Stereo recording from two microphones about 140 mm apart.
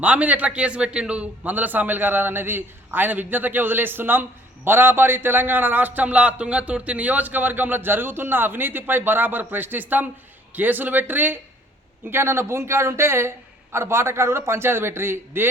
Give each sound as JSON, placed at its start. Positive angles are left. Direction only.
{"t": 0.0, "sound": "a man's voice", "side_deg": -10}